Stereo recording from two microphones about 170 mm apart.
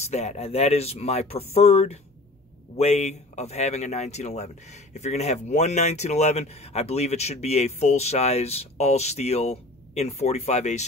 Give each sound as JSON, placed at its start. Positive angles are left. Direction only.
{"t": 0.0, "sound": "speech", "side_deg": 40}